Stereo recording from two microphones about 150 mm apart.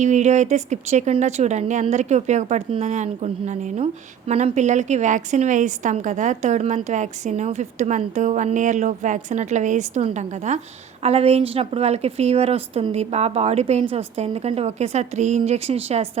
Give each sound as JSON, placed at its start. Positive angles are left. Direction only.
{"t": 0.0, "sound": "a woman's voice", "side_deg": -50}